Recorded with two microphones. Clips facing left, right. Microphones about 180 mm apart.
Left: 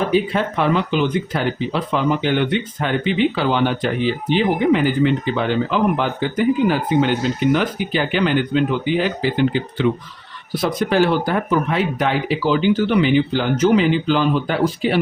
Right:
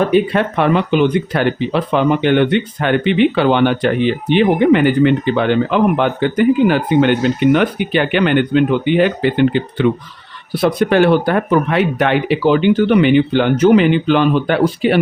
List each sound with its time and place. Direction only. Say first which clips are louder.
0.1 s speech: right 4 dB; 60° right (ahead or behind)